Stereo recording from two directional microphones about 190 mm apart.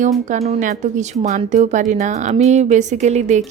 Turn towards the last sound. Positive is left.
turn(degrees=-35)  # may be behind; listen again after turning